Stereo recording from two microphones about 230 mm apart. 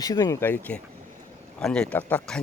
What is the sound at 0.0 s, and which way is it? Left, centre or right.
Speech, centre.